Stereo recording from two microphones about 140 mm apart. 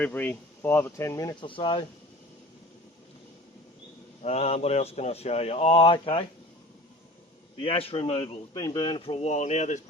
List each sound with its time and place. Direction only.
0.0 s speech: 10° left (ahead or behind); by 1.8 s 35° left (ahead or behind)
4.2 s a man's voice: 50° left (ahead or behind)
7.6 s a man's voice: 40° left (ahead or behind)
8.5 s a man's voice: 30° left (ahead or behind); by 9.8 s 55° left (ahead or behind)